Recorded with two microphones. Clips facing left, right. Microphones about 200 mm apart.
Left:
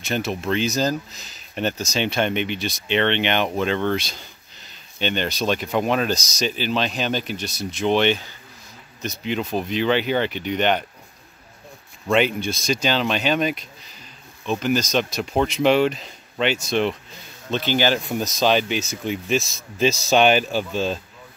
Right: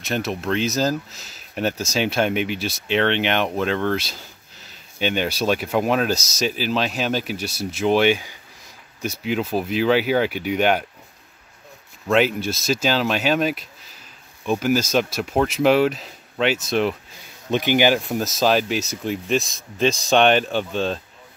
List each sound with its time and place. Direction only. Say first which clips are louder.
0.0 s speech: even; centre (ahead or behind)
12.1 s speech: right 1 dB; 5° right (ahead or behind)
17.5 s speech: right 3 dB; 15° right (ahead or behind)
18.0 s speech: right 1 dB; centre (ahead or behind)